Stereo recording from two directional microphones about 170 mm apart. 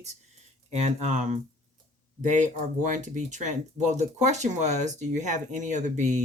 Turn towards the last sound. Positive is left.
turn(degrees=-45)  # may be behind; listen again after turning